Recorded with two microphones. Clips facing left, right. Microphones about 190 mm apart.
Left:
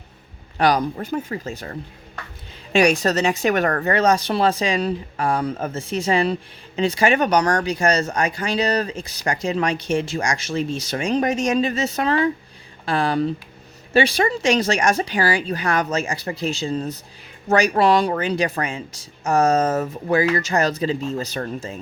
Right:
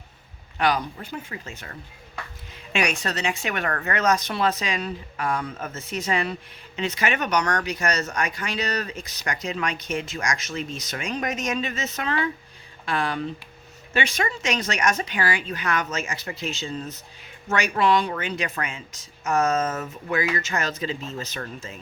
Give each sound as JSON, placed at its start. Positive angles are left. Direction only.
{"t": 0.5, "sound": "speech", "side_deg": 40}
{"t": 2.7, "sound": "speech", "side_deg": 35}